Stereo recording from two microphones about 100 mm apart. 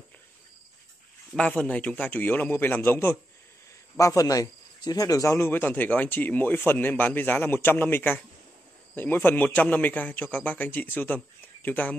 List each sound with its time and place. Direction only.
1.3 s a man's voice: 10° left (ahead or behind)
3.9 s a man's voice: 35° left (ahead or behind); by 12.0 s 15° left (ahead or behind)